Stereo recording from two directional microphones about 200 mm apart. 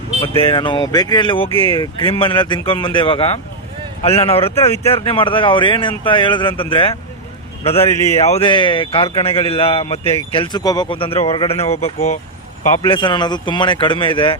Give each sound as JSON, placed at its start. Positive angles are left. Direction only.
{"t": 0.2, "sound": "a man's voice", "side_deg": 25}
{"t": 1.5, "sound": "a man's voice", "side_deg": 10}
{"t": 1.7, "sound": "a man's voice", "side_deg": 25}
{"t": 7.9, "sound": "a man's voice", "side_deg": 15}
{"t": 8.2, "sound": "a man's voice", "side_deg": 30}
{"t": 12.8, "sound": "a man's voice", "side_deg": 25}